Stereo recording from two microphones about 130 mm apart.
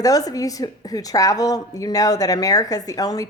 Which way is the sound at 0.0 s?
30° left (ahead or behind).